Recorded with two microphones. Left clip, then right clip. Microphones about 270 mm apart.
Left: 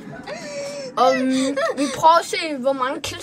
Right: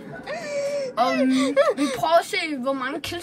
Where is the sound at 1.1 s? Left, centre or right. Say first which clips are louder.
Right 1 dB; centre.